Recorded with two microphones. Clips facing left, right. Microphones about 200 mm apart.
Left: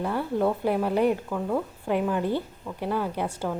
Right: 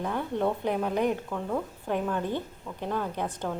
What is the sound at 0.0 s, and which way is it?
Speech, 5° left (ahead or behind).